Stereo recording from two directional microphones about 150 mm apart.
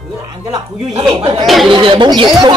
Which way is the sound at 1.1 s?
30° right (ahead or behind).